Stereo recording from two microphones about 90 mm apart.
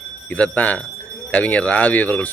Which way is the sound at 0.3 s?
15° left (ahead or behind).